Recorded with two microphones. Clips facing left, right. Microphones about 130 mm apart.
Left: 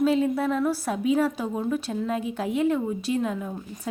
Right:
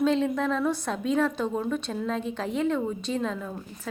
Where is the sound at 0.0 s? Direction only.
5° left (ahead or behind).